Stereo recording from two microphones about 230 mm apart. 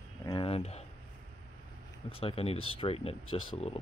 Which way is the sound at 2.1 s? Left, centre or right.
Left.